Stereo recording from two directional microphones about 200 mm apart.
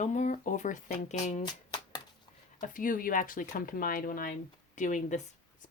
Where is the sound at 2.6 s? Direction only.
40° left (ahead or behind).